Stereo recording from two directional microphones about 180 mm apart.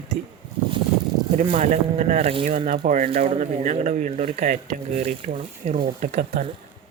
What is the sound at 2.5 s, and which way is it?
Speech, 45° right (ahead or behind).